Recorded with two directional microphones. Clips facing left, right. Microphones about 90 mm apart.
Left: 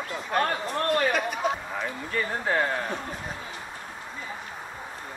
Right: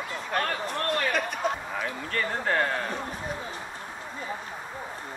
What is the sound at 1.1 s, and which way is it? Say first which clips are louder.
Speech: left 1 dB; 5° left (ahead or behind).